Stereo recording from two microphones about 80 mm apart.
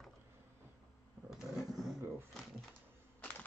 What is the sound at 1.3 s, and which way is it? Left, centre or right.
Vehicle, centre.